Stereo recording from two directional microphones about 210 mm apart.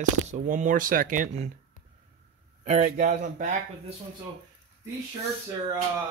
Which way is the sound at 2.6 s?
35° right (ahead or behind).